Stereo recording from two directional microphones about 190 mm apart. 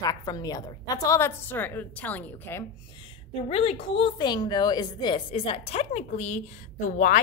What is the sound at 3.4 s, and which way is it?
A woman's voice, 30° left (ahead or behind).